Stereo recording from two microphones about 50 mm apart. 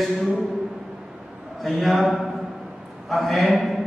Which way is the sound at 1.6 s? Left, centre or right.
Centre.